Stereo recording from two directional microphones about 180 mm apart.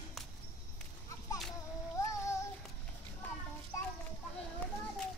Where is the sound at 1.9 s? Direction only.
15° left (ahead or behind).